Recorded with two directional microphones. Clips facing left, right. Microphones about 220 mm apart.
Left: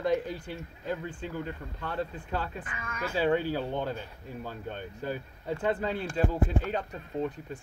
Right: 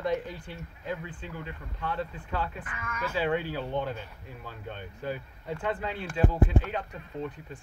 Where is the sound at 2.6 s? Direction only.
30° left (ahead or behind).